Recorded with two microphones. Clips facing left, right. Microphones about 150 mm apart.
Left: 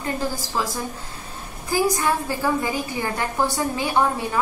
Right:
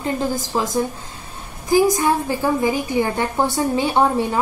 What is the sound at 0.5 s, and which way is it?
A woman's voice, 20° right (ahead or behind).